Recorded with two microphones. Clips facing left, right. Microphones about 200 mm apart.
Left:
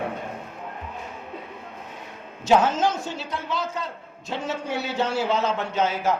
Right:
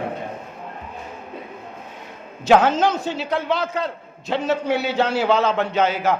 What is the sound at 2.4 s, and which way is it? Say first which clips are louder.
A man's voice: right 4 dB; 65° right (ahead or behind).